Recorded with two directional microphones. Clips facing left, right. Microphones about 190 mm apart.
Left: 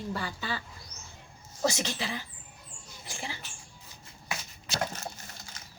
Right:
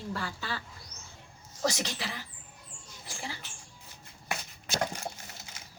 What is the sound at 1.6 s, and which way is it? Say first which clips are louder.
Speech: left 2 dB; 25° left (ahead or behind).